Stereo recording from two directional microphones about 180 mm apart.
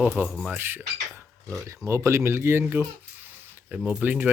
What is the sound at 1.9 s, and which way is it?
Speech, 15° right (ahead or behind).